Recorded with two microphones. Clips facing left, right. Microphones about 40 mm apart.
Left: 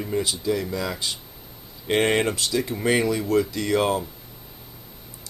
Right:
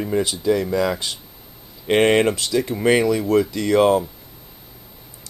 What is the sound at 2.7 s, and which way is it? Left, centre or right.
Speech, centre.